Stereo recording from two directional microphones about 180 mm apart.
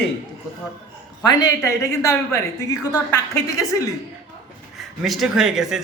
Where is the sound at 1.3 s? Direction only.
20° left (ahead or behind).